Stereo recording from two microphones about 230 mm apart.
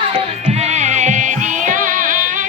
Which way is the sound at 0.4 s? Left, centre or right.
Right.